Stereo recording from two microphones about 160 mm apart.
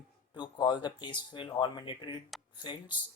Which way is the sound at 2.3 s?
Centre (ahead or behind).